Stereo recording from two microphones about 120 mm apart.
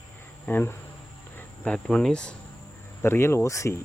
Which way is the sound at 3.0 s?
20° left (ahead or behind).